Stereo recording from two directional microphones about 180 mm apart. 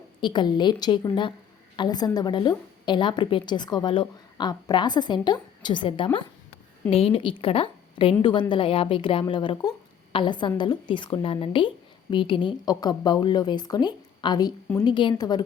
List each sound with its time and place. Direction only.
0.2 s a woman's voice: 25° left (ahead or behind)